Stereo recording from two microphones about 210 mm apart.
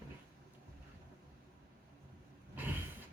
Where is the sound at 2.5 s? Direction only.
10° right (ahead or behind).